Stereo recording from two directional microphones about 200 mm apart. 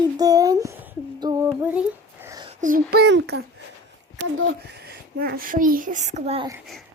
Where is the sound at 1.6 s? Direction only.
10° right (ahead or behind).